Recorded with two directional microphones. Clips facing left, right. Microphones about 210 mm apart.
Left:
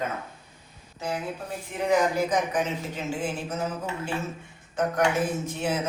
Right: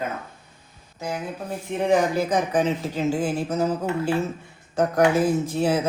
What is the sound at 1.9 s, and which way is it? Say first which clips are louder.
Speech: right 2 dB; 35° right (ahead or behind).